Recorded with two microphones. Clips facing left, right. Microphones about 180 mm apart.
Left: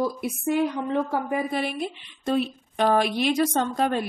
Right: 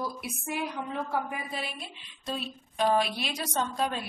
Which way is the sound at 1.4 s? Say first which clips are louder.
Left 11 dB; 60° left (ahead or behind).